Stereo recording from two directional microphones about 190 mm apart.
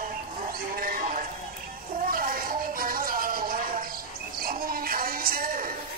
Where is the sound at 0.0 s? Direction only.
50° right (ahead or behind).